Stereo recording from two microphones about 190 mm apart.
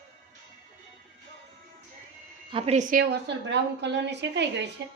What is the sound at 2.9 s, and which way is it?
A woman's voice, 55° right (ahead or behind).